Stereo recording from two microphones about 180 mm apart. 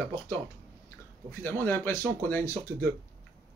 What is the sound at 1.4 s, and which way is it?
Speech, 10° left (ahead or behind).